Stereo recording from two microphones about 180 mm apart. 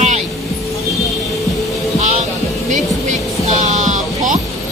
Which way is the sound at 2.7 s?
40° right (ahead or behind).